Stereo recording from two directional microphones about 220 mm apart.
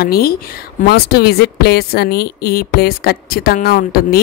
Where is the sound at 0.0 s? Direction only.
45° left (ahead or behind).